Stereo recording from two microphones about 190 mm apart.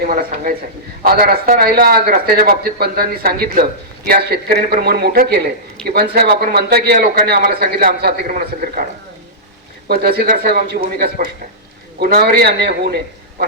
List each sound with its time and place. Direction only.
0.0 s speech: 50° right (ahead or behind)
9.9 s speech: 55° right (ahead or behind)